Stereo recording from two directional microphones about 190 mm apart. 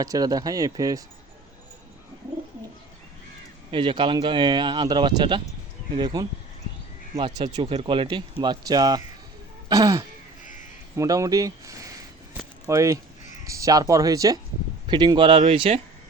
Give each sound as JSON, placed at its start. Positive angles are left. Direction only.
{"t": 0.0, "sound": "speech", "side_deg": -20}
{"t": 3.7, "sound": "speech", "side_deg": -25}